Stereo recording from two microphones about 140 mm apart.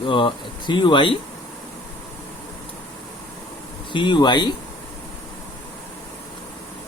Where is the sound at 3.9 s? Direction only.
35° left (ahead or behind).